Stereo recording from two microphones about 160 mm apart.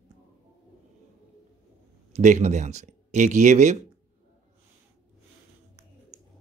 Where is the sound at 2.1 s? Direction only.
45° right (ahead or behind).